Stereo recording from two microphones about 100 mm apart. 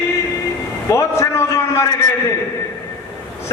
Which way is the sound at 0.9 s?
30° left (ahead or behind).